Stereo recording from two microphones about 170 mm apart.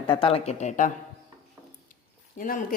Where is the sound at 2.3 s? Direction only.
55° left (ahead or behind).